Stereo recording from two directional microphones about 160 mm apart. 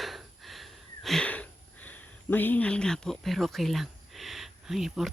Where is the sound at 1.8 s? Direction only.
10° left (ahead or behind).